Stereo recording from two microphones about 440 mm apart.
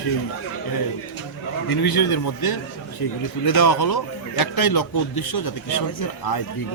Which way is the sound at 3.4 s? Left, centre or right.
Left.